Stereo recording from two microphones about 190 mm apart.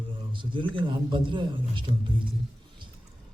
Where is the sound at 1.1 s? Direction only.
25° right (ahead or behind).